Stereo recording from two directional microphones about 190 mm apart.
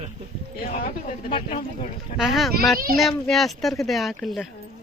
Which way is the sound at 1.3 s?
25° left (ahead or behind).